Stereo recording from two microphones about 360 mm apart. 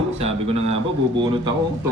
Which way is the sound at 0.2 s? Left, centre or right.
Centre.